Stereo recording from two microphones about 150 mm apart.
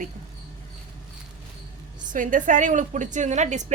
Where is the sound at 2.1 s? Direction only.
60° right (ahead or behind).